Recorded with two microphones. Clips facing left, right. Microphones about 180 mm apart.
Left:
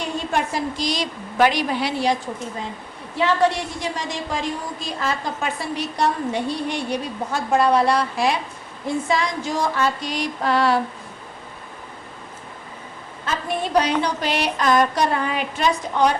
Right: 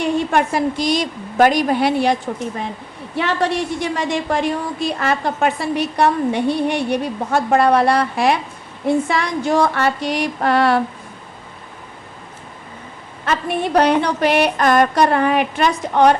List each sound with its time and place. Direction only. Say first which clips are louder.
0.0 s a woman's voice: right 7 dB; 60° right (ahead or behind)
3.2 s a woman's voice: even; 60° right (ahead or behind)
13.2 s a woman's voice: right 5 dB; 65° right (ahead or behind)